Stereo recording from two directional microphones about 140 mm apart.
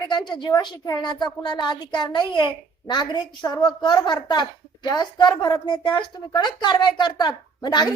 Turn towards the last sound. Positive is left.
turn(degrees=30)  # may be behind; listen again after turning